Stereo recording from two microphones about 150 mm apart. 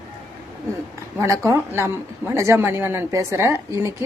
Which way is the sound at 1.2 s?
20° right (ahead or behind).